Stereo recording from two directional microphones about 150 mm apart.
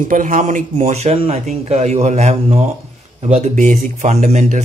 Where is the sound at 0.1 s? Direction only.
60° right (ahead or behind).